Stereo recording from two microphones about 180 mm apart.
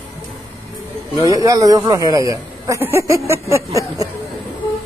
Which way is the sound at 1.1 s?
20° right (ahead or behind).